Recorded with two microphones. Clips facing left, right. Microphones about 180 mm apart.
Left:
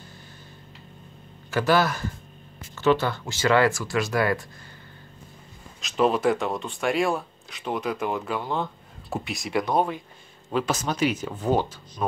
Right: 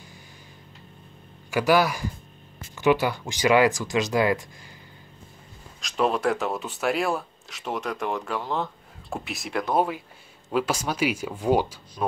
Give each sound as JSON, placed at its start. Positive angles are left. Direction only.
{"t": 1.5, "sound": "speech", "side_deg": -15}
{"t": 5.8, "sound": "speech", "side_deg": 0}